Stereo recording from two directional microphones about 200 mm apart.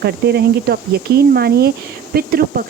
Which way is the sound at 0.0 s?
55° right (ahead or behind).